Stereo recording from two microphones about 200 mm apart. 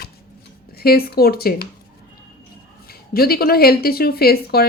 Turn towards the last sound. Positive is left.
turn(degrees=50)  # may be behind; listen again after turning